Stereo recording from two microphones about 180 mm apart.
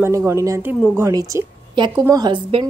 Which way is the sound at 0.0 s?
15° right (ahead or behind).